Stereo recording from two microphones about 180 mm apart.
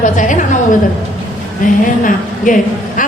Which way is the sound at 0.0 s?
45° left (ahead or behind).